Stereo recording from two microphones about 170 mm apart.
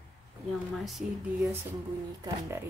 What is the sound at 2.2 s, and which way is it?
Speech, 15° right (ahead or behind).